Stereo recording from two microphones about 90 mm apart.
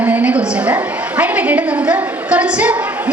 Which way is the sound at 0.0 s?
15° right (ahead or behind).